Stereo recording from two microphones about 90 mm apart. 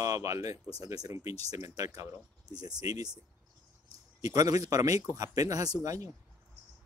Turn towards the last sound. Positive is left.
turn(degrees=-40)  # may be behind; listen again after turning